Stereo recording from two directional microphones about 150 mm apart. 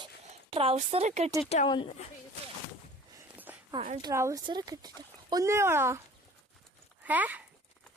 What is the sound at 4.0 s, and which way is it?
Speech, 20° right (ahead or behind).